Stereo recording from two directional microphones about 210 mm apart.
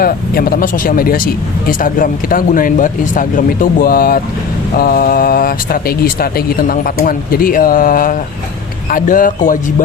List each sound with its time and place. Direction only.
0.0 s speech: 45° left (ahead or behind)